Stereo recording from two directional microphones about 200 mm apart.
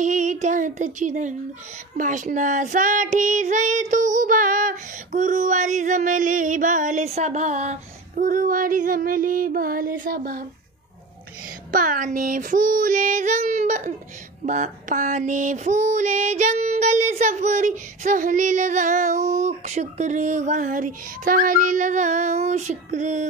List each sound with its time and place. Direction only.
0.0 s female singing: 40° right (ahead or behind)
11.7 s female singing: 40° right (ahead or behind)